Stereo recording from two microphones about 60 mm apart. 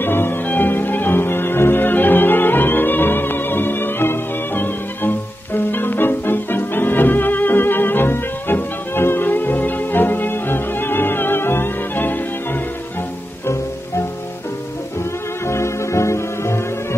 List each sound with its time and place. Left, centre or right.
0.0 s music: left
15.4 s music: left